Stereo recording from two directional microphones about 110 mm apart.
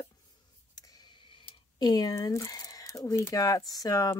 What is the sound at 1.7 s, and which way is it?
Speech, 35° left (ahead or behind).